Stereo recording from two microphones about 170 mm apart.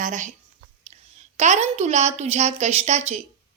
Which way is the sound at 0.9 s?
35° right (ahead or behind).